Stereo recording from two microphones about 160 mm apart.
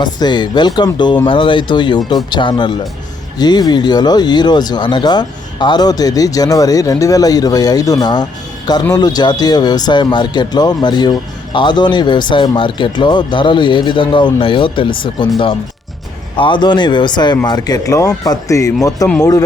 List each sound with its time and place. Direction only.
0.0 s speech: 25° left (ahead or behind)
16.4 s speech: 30° left (ahead or behind)